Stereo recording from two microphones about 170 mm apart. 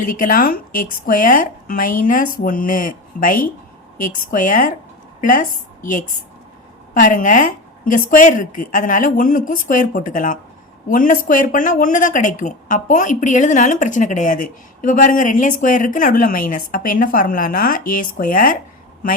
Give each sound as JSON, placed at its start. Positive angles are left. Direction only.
{"t": 0.0, "sound": "a woman's voice", "side_deg": 55}